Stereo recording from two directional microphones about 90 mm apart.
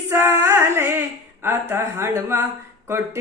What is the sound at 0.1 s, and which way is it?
Female singing, 30° right (ahead or behind).